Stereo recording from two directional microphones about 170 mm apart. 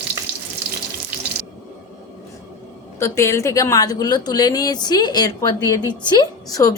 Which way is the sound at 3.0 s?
15° left (ahead or behind).